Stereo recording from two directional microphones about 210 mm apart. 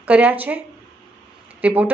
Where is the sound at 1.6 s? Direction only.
5° right (ahead or behind).